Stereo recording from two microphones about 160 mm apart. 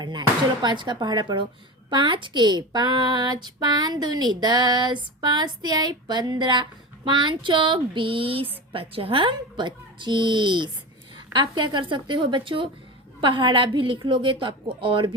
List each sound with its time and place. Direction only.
0.0 s a woman's voice: 30° right (ahead or behind)